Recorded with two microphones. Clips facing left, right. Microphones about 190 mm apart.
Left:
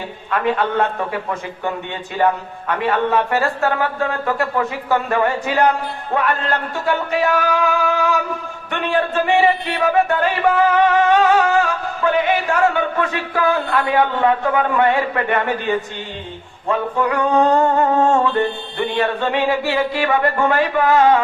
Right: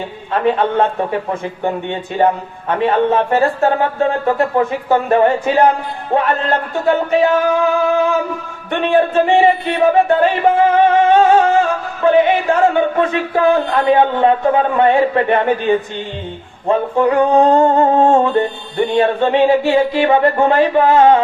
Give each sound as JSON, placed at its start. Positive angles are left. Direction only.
{"t": 0.3, "sound": "speech", "side_deg": -30}
{"t": 16.6, "sound": "a sound", "side_deg": -30}
{"t": 18.8, "sound": "speech", "side_deg": -30}